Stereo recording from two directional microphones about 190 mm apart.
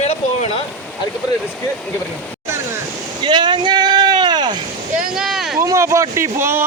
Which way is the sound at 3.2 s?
25° right (ahead or behind).